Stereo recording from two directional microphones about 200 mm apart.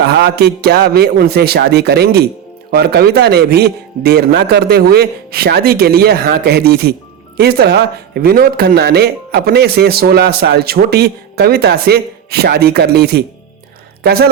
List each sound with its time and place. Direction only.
0.2 s speech: 55° right (ahead or behind)